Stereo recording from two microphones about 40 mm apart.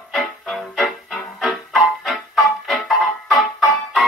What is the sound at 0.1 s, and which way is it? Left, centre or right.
Music, centre.